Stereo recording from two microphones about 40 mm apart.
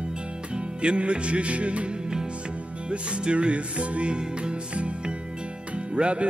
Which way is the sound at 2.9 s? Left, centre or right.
Right.